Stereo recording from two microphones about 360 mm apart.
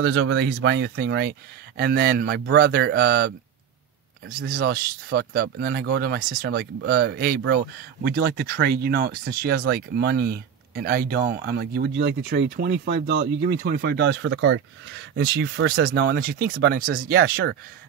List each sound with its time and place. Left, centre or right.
0.0 s speech: right
4.4 s speech: right